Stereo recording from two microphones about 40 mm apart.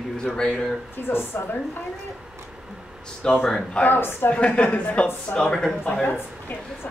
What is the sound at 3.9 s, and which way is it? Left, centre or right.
Speech, left.